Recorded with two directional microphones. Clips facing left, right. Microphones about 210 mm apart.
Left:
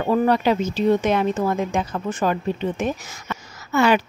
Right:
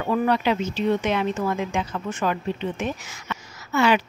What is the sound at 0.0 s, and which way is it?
Speech, 35° left (ahead or behind).